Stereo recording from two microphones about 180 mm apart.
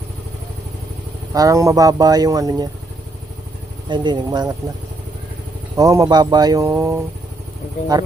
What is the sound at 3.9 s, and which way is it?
Speech, 25° right (ahead or behind).